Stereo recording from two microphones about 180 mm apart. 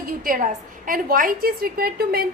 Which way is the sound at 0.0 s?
50° right (ahead or behind).